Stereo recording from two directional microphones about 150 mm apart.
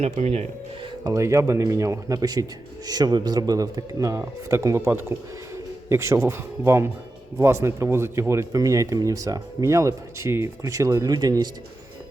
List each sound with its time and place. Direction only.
0.0 s speech: 45° right (ahead or behind)
1.0 s speech: 20° right (ahead or behind)